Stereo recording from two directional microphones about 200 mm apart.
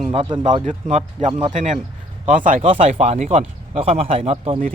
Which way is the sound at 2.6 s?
30° right (ahead or behind).